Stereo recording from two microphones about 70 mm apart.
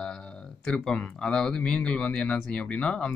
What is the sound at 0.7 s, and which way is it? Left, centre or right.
Speech, centre.